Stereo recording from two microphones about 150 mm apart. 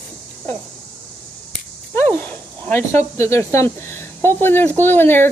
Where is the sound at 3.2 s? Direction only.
20° left (ahead or behind).